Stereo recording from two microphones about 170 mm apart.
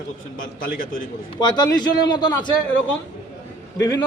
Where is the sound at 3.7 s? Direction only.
20° left (ahead or behind).